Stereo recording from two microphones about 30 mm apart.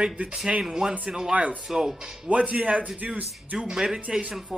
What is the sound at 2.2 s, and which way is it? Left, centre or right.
Speech, right.